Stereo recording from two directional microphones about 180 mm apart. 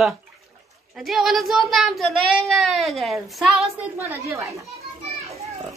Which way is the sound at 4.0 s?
15° right (ahead or behind).